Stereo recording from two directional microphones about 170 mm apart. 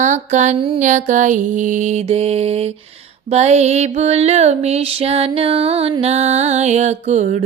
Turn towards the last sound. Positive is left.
turn(degrees=-45)  # may be behind; listen again after turning